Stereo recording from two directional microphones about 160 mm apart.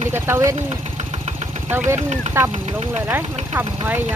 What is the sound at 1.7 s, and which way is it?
Speech, 15° right (ahead or behind).